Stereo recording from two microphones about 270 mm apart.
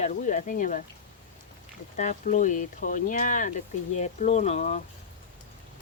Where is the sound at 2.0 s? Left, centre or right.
Left.